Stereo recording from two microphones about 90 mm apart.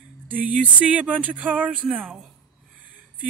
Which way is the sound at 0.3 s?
15° right (ahead or behind).